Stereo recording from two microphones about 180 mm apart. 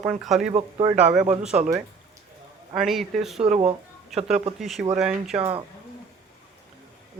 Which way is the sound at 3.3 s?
35° right (ahead or behind).